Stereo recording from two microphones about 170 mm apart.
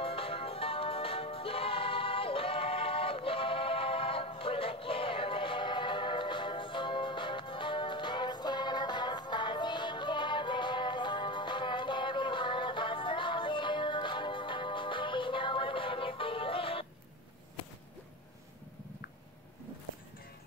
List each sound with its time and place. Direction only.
0.0 s music: 35° left (ahead or behind)